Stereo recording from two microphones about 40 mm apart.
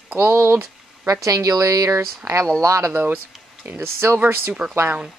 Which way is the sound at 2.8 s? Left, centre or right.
Right.